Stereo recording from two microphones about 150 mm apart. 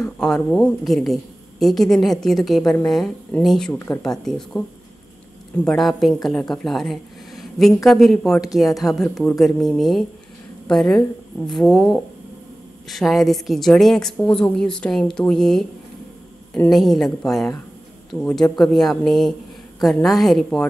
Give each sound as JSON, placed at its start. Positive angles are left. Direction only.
{"t": 0.2, "sound": "a woman's voice", "side_deg": 5}
{"t": 3.7, "sound": "a woman's voice", "side_deg": 15}
{"t": 4.0, "sound": "a woman's voice", "side_deg": 5}